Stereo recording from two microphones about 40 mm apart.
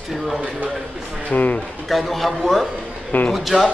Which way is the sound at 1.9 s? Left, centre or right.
Centre.